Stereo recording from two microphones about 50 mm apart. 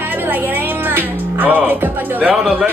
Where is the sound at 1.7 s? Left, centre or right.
Right.